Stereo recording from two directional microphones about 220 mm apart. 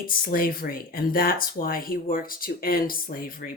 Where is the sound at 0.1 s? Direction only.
40° left (ahead or behind).